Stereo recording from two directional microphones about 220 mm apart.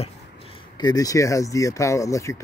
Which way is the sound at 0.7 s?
15° left (ahead or behind).